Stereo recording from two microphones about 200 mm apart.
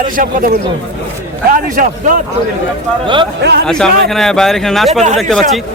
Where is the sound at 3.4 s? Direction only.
60° right (ahead or behind).